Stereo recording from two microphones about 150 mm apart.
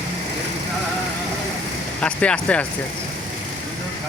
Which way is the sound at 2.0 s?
5° left (ahead or behind).